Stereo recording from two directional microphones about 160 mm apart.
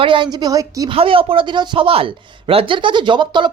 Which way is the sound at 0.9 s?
35° right (ahead or behind).